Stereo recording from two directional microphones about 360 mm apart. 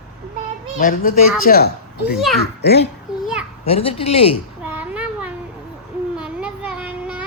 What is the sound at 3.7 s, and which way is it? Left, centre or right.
Speech, centre.